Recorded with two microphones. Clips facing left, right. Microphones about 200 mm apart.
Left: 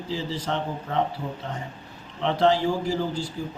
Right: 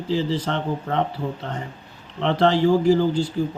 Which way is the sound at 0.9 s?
60° right (ahead or behind).